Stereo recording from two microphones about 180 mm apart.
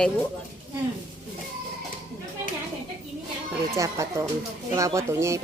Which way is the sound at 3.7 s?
15° right (ahead or behind).